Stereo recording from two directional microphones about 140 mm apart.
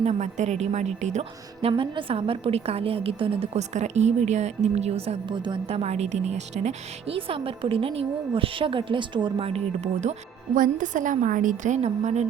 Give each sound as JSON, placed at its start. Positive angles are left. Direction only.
{"t": 0.0, "sound": "a woman's voice", "side_deg": -55}
{"t": 1.6, "sound": "a woman's voice", "side_deg": -35}